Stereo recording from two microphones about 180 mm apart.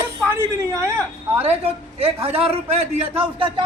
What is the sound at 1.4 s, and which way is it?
A man's voice, 35° right (ahead or behind).